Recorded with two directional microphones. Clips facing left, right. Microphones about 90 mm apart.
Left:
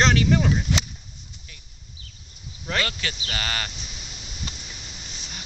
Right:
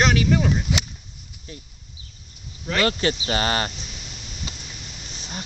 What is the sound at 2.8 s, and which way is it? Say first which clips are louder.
Speech: right 8 dB; 35° right (ahead or behind).